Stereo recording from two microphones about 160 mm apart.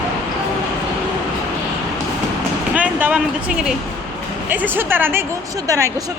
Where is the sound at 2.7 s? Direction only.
10° right (ahead or behind).